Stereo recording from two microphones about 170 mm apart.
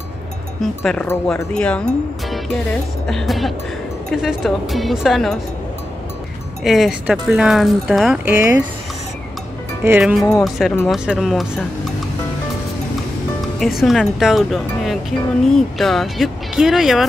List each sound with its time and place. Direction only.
0.6 s speech: centre (ahead or behind)
3.1 s speech: centre (ahead or behind)
6.6 s speech: centre (ahead or behind)
8.3 s speech: 20° right (ahead or behind)
9.8 s speech: 5° right (ahead or behind)
13.6 s speech: centre (ahead or behind)